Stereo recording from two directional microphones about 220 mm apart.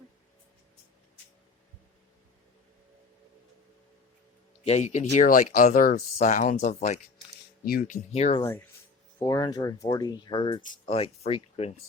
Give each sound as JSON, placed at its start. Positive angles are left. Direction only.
{"t": 4.6, "sound": "speech", "side_deg": 30}
{"t": 8.4, "sound": "speech", "side_deg": 15}